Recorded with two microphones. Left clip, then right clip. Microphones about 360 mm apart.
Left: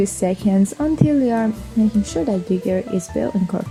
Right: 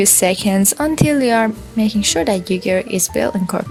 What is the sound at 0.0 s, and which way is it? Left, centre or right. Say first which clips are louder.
A woman's voice: right 5 dB; right.